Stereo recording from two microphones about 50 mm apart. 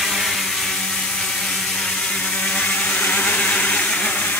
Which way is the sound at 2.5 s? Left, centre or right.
Left.